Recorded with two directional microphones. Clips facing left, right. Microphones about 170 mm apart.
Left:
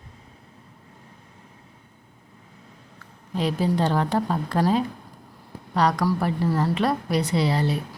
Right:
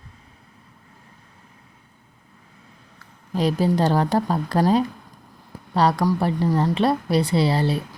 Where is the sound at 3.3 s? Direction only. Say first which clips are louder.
Right 3 dB; 40° right (ahead or behind).